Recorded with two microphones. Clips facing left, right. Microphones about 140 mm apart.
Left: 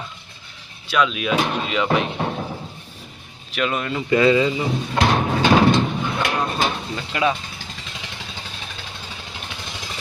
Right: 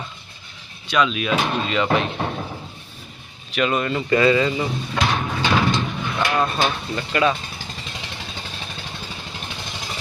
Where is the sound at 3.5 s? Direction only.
Centre (ahead or behind).